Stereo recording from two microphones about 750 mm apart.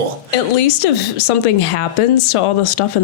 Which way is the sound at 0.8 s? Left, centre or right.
Left.